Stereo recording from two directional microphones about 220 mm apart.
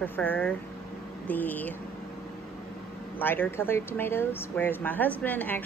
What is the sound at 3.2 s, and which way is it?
Speech, 10° left (ahead or behind).